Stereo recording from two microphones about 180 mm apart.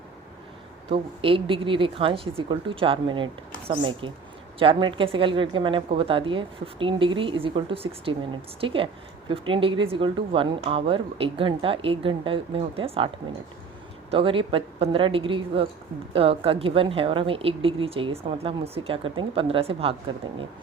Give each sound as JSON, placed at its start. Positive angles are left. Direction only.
{"t": 0.9, "sound": "a woman's voice", "side_deg": -30}
{"t": 14.1, "sound": "a woman's voice", "side_deg": -30}